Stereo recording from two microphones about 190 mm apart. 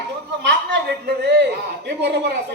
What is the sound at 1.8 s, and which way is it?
Speech, 60° right (ahead or behind).